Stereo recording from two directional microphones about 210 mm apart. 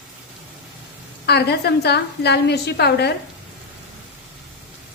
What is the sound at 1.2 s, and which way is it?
A woman's voice, 50° left (ahead or behind).